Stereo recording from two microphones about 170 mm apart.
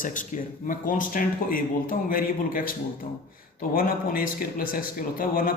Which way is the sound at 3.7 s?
55° left (ahead or behind).